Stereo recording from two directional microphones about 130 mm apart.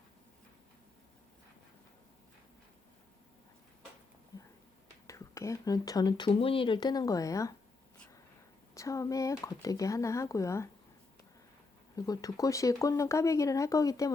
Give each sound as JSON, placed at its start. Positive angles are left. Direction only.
{"t": 5.0, "sound": "speech", "side_deg": 25}
{"t": 8.7, "sound": "speech", "side_deg": 25}
{"t": 11.9, "sound": "speech", "side_deg": 30}